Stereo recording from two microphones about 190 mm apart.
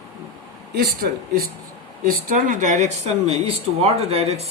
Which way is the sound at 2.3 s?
40° right (ahead or behind).